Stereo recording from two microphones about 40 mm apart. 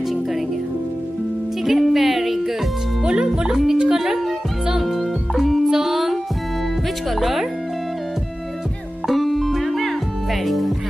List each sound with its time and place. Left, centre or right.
1.6 s speech: centre
3.0 s speech: right
3.9 s music: centre
7.1 s speech: centre
9.0 s music: centre